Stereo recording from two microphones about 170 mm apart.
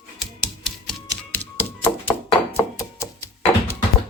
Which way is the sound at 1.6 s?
15° left (ahead or behind).